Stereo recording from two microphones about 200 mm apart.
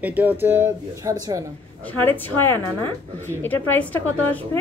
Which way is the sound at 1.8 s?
10° left (ahead or behind).